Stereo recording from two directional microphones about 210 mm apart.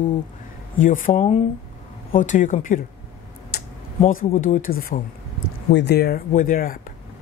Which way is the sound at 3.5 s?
45° left (ahead or behind).